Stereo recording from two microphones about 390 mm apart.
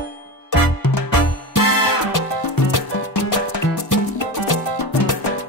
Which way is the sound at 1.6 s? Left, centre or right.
Left.